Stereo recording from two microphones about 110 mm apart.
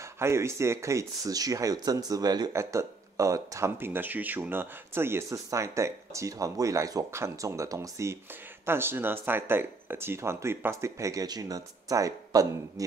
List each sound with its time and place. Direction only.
0.2 s speech: 25° right (ahead or behind)
2.5 s speech: 25° right (ahead or behind)